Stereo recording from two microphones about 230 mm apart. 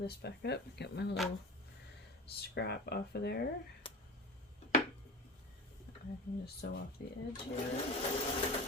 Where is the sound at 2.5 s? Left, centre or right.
Left.